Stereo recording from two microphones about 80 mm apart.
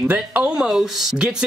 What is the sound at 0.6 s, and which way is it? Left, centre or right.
Speech, centre.